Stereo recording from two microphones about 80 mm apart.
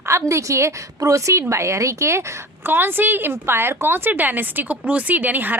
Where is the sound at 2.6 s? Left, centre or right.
Right.